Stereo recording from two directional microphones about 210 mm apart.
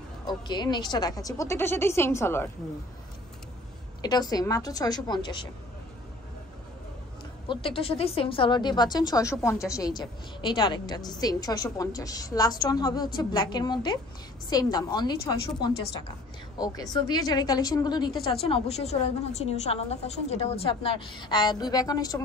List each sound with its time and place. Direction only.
0.3 s speech: 20° left (ahead or behind)
4.0 s a woman's voice: 20° left (ahead or behind)
7.4 s a woman's voice: 25° left (ahead or behind)